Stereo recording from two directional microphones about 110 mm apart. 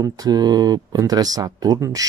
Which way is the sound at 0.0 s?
35° right (ahead or behind).